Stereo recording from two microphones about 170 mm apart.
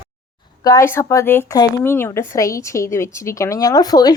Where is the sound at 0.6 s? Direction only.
15° left (ahead or behind).